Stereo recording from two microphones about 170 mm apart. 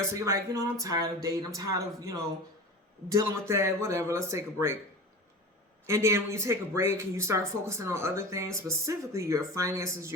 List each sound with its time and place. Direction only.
0.1 s speech: 20° right (ahead or behind)
5.8 s speech: 15° right (ahead or behind)